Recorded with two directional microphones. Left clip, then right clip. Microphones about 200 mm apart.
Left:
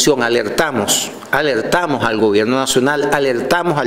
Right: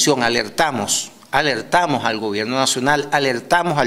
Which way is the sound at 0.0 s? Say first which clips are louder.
Left 3 dB; 30° right (ahead or behind).